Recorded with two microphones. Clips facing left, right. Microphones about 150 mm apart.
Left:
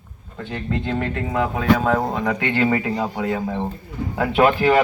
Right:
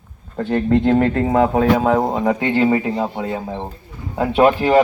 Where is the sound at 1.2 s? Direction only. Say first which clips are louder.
Right 8 dB; 40° right (ahead or behind).